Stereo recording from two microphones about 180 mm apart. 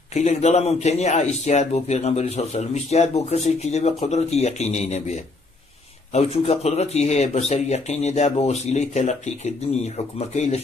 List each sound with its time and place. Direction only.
0.1 s a man's voice: 40° left (ahead or behind)